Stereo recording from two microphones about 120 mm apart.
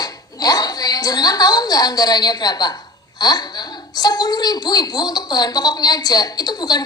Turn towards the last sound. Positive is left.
turn(degrees=35)  # may be behind; listen again after turning